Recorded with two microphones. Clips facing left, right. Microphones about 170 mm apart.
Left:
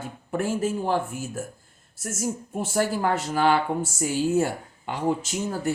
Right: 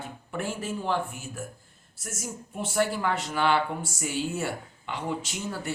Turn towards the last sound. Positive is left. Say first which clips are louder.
# left 6 dB
turn(degrees=45)  # may be behind; listen again after turning